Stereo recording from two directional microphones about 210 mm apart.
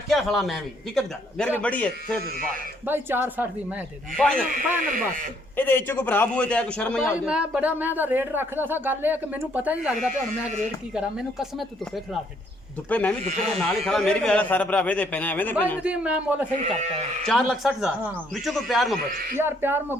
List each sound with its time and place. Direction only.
0.1 s a man's voice: centre (ahead or behind)
2.8 s speech: 10° right (ahead or behind)
4.2 s a man's voice: 5° left (ahead or behind)
4.8 s speech: 40° right (ahead or behind)
5.5 s a man's voice: 10° left (ahead or behind)
15.8 s a man's voice: 5° right (ahead or behind)
16.6 s speech: 30° right (ahead or behind)
17.2 s a man's voice: centre (ahead or behind)
19.4 s speech: 10° right (ahead or behind)